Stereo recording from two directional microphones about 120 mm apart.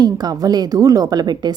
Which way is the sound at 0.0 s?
35° right (ahead or behind).